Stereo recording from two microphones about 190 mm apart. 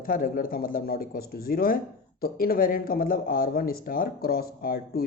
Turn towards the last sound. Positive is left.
turn(degrees=50)  # may be behind; listen again after turning